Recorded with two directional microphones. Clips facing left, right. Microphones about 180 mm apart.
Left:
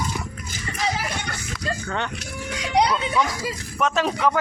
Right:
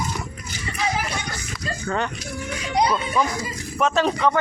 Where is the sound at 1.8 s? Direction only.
Centre (ahead or behind).